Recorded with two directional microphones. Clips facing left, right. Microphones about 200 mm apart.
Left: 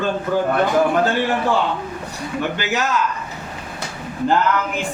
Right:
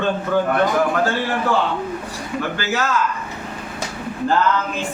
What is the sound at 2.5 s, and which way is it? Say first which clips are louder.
Speech: even; 20° left (ahead or behind).